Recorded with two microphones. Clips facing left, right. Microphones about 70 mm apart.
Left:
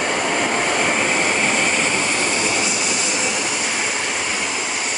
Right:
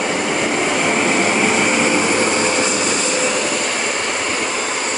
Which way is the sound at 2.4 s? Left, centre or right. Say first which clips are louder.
Right 4 dB; right.